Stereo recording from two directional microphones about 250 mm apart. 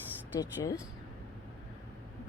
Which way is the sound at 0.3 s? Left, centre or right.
Centre.